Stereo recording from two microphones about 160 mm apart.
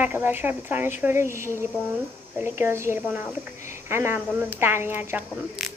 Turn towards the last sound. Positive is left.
turn(degrees=-10)  # may be behind; listen again after turning